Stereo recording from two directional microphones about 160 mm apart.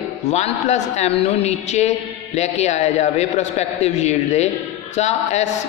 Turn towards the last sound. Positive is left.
turn(degrees=45)  # may be behind; listen again after turning